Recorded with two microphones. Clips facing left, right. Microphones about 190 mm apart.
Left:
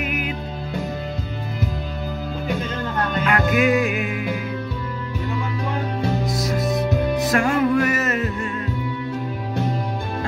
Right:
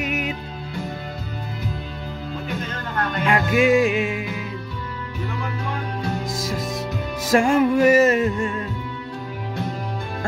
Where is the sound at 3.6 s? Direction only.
25° right (ahead or behind).